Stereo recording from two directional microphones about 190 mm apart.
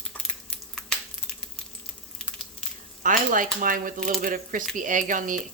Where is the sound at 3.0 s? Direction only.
45° right (ahead or behind).